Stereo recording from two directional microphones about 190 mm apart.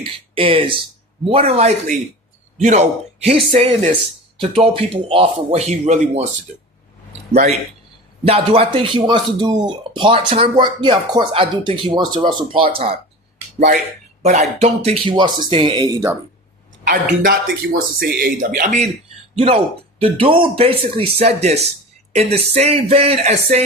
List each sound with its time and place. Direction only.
0.0 s a man's voice: 30° right (ahead or behind)
8.2 s speech: 30° right (ahead or behind)
14.2 s speech: 35° right (ahead or behind); by 16.1 s 15° right (ahead or behind)
16.9 s speech: 45° right (ahead or behind)
20.0 s a man's voice: 30° right (ahead or behind)